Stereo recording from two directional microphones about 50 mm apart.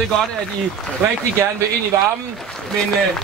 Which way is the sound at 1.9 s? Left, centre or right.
Right.